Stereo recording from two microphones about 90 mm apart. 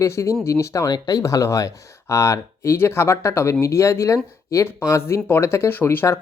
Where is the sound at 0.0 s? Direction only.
35° left (ahead or behind).